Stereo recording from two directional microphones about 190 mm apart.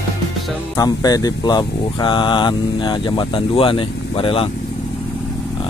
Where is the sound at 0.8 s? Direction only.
20° left (ahead or behind).